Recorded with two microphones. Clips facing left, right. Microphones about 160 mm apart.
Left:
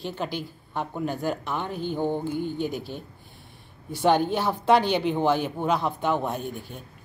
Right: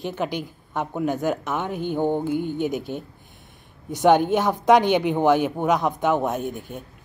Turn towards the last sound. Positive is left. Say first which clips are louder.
# right 4 dB
turn(degrees=-15)  # may be behind; listen again after turning